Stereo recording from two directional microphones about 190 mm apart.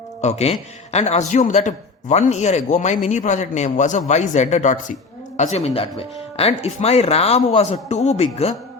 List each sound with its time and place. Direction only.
0.2 s a man's voice: 35° left (ahead or behind)